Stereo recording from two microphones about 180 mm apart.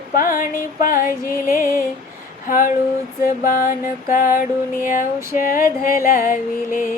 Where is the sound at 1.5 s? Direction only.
50° left (ahead or behind).